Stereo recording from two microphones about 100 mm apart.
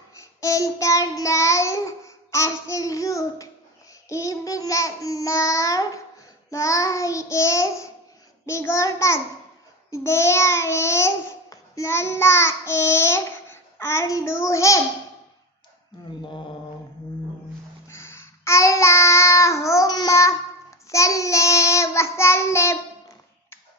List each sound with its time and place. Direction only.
0.1 s child singing: 30° left (ahead or behind)
4.1 s babbling: 35° left (ahead or behind)
8.5 s child singing: 30° left (ahead or behind)
9.8 s a child's voice: 30° left (ahead or behind)
16.1 s mantra: 50° left (ahead or behind)
17.8 s child singing: 25° left (ahead or behind)